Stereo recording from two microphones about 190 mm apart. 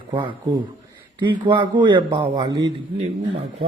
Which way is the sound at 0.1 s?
25° right (ahead or behind).